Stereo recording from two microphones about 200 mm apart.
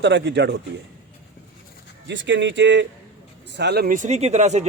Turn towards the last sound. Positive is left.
turn(degrees=-35)  # may be behind; listen again after turning